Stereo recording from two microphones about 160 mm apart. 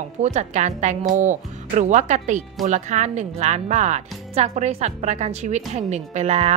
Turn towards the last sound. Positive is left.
turn(degrees=-45)  # may be behind; listen again after turning